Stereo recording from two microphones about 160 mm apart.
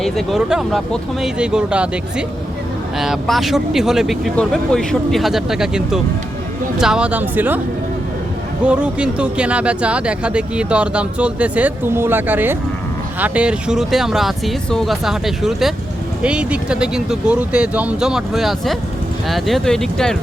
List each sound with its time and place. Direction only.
0.0 s speech: centre (ahead or behind)
8.6 s speech: 5° right (ahead or behind)